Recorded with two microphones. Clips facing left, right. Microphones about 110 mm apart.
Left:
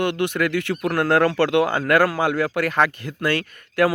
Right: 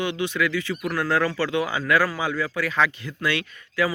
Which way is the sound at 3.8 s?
60° left (ahead or behind).